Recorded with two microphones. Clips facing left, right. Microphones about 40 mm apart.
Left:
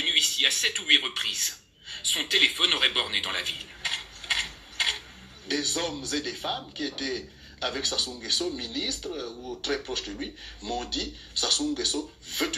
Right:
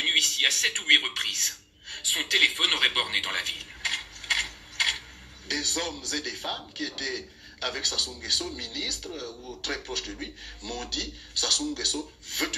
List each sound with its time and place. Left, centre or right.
0.5 s speech: left
3.3 s mechanisms: left
5.5 s speech: left
9.7 s speech: left